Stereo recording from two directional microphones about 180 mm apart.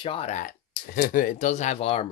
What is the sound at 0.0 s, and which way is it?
Speech, 30° left (ahead or behind).